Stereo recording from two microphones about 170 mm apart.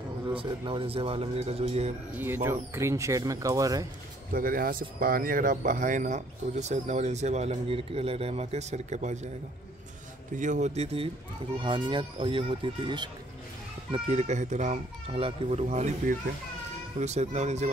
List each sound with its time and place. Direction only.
0.4 s speech: 30° right (ahead or behind)
2.1 s speech: 15° right (ahead or behind)
4.3 s speech: 55° right (ahead or behind)
10.3 s speech: 45° right (ahead or behind); by 13.1 s 25° right (ahead or behind)
13.9 s speech: 40° right (ahead or behind)